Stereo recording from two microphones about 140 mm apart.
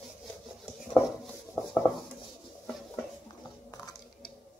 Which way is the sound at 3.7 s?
30° left (ahead or behind).